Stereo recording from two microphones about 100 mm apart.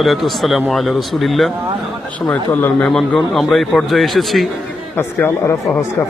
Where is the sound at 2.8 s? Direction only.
5° left (ahead or behind).